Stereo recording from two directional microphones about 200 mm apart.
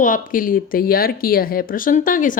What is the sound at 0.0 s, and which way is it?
Speech, 40° left (ahead or behind).